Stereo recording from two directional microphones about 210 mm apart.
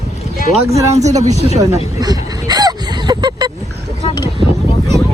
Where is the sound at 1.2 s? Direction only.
35° right (ahead or behind).